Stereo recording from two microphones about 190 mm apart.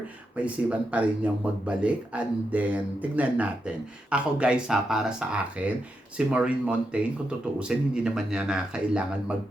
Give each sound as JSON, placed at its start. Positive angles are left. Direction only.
{"t": 0.3, "sound": "speech", "side_deg": -5}